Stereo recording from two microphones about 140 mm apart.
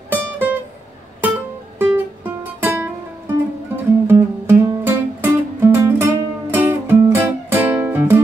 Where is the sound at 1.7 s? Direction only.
15° right (ahead or behind).